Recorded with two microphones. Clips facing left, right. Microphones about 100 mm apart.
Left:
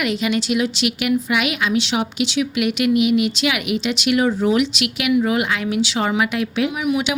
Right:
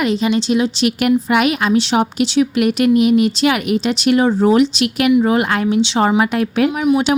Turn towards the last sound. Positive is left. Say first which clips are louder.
# right 6 dB
turn(degrees=-35)  # may be behind; listen again after turning